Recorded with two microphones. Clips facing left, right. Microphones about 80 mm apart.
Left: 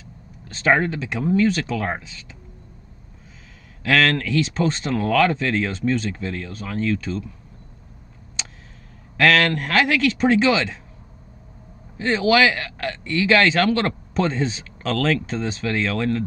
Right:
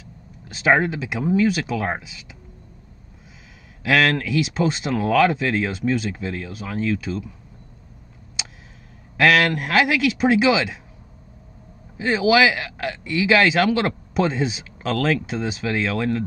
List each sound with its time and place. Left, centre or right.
0.0 s speech: centre
3.8 s speech: centre
8.4 s a sound: centre
9.1 s speech: centre
12.0 s speech: centre